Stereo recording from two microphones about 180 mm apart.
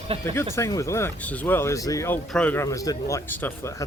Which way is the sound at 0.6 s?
15° left (ahead or behind).